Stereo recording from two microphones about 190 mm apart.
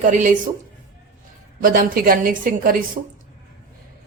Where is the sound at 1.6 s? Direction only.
45° right (ahead or behind).